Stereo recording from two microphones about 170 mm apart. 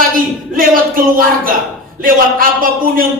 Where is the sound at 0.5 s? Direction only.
55° right (ahead or behind).